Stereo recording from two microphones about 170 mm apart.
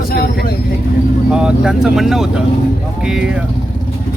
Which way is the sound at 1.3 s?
5° right (ahead or behind).